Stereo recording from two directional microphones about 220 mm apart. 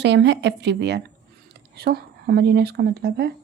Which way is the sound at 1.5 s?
45° right (ahead or behind).